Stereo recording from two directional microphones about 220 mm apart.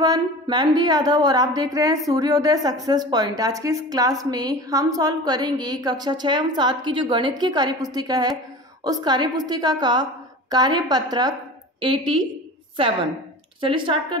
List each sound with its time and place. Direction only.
0.0 s a woman's voice: 20° right (ahead or behind)
13.6 s a woman's voice: 25° right (ahead or behind)